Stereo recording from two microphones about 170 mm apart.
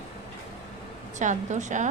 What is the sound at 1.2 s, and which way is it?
Speech, 45° right (ahead or behind).